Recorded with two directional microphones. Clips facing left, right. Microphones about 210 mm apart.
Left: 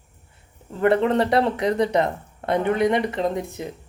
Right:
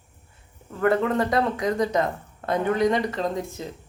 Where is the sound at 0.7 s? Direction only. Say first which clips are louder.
Left 3 dB; 25° left (ahead or behind).